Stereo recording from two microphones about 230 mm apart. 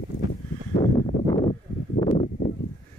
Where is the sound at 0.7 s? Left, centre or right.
Left.